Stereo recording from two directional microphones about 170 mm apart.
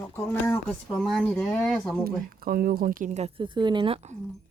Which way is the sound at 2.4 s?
60° right (ahead or behind).